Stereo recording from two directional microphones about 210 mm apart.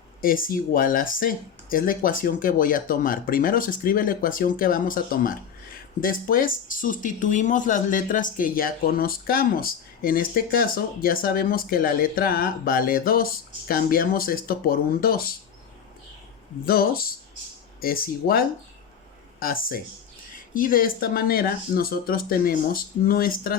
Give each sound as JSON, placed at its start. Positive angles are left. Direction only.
{"t": 0.2, "sound": "speech", "side_deg": 40}
{"t": 16.6, "sound": "speech", "side_deg": 45}